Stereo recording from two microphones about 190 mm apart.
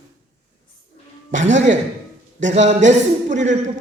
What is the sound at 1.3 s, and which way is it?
A man's voice, 40° right (ahead or behind).